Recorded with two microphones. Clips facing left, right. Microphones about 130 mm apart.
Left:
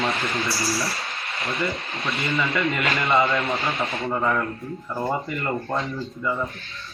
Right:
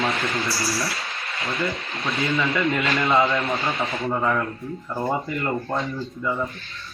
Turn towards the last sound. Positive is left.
turn(degrees=0)  # may be behind; listen again after turning